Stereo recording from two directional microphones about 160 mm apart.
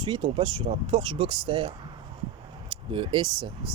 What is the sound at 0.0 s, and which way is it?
Speech, 30° right (ahead or behind).